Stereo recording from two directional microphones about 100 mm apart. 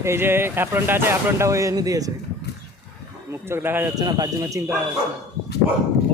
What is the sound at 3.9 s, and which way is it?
Speech, 40° right (ahead or behind).